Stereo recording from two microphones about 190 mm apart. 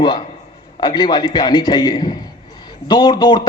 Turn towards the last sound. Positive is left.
turn(degrees=20)  # may be behind; listen again after turning